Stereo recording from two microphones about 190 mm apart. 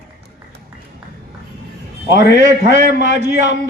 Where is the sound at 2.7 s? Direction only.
45° right (ahead or behind).